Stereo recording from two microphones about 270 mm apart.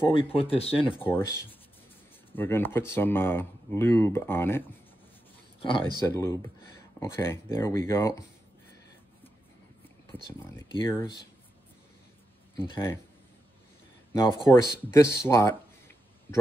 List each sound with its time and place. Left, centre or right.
0.1 s speech: centre
1.0 s speech: centre
5.6 s speech: centre
10.1 s speech: centre
12.5 s speech: centre
14.5 s speech: centre